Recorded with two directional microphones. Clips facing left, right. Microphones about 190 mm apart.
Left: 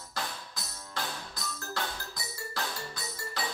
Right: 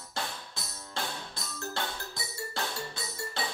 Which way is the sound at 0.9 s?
25° right (ahead or behind).